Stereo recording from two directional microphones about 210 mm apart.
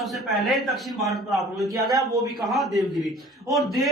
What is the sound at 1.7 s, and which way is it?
Speech, 15° right (ahead or behind).